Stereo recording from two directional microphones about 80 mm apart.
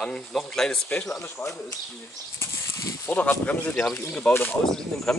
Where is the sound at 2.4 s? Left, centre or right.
Left.